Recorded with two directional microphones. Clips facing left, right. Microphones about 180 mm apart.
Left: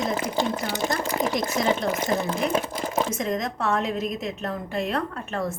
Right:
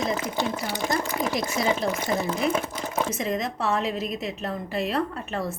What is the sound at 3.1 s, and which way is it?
A woman's voice, centre (ahead or behind).